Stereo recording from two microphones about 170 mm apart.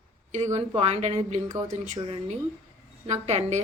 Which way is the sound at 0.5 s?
40° right (ahead or behind).